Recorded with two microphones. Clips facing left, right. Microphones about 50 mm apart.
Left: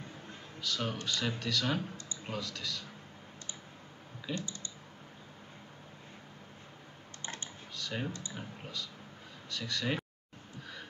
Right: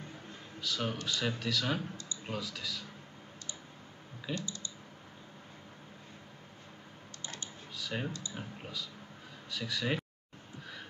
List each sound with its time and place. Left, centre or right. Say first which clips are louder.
0.6 s speech: even; centre
4.4 s speech: even; left
7.7 s computer keyboard: even; centre
8.4 s speech: even; centre